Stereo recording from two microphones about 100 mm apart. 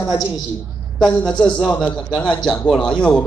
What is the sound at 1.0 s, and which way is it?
A man's voice, 5° left (ahead or behind).